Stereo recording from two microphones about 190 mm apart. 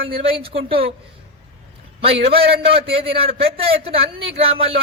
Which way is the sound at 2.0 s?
30° right (ahead or behind).